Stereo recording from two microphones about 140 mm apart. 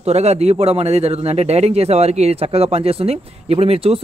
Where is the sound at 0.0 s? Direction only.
50° right (ahead or behind).